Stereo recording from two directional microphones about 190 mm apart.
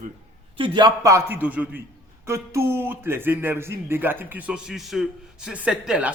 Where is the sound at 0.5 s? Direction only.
25° right (ahead or behind).